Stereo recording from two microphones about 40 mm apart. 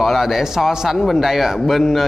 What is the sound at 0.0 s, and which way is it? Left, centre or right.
Speech, centre.